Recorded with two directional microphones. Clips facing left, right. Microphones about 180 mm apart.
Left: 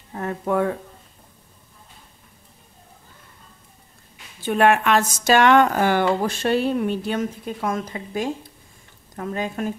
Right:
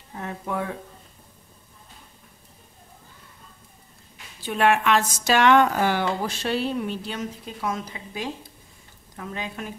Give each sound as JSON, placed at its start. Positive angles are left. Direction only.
{"t": 0.1, "sound": "a woman's voice", "side_deg": 50}
{"t": 4.4, "sound": "a woman's voice", "side_deg": 50}